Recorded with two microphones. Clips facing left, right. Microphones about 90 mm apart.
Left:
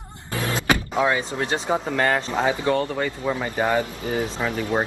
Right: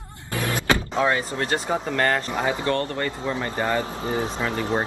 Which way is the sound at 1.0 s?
10° left (ahead or behind).